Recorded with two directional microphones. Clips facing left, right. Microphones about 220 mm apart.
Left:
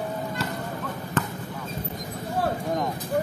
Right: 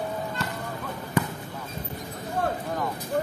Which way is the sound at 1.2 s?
10° right (ahead or behind).